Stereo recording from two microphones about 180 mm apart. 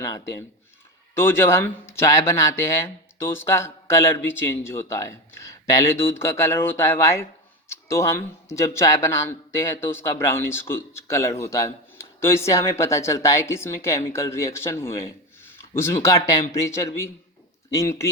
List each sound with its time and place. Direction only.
1.1 s speech: 15° left (ahead or behind)